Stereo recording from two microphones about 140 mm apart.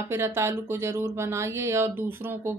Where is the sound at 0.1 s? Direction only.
20° right (ahead or behind).